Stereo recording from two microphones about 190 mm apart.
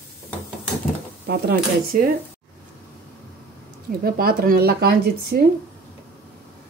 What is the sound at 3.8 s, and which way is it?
Speech, 50° right (ahead or behind).